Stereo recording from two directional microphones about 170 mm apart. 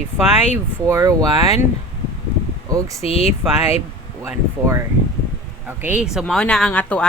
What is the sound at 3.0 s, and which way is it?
Speech, 40° left (ahead or behind).